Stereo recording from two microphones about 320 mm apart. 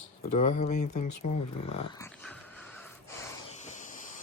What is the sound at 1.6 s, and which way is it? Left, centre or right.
Dog, centre.